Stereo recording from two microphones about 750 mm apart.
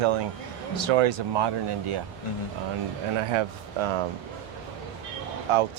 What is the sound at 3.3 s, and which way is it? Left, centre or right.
Speech, right.